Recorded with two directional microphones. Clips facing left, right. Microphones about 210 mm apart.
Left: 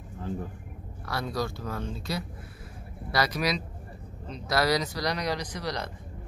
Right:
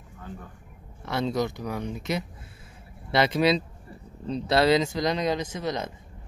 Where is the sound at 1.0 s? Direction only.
20° right (ahead or behind).